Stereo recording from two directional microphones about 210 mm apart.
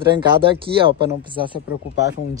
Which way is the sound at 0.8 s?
25° right (ahead or behind).